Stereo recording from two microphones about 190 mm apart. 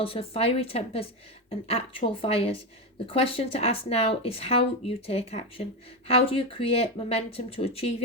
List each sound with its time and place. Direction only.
0.0 s speech: 30° left (ahead or behind)